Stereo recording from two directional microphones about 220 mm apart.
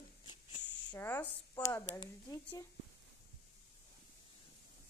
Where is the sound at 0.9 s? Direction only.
10° left (ahead or behind).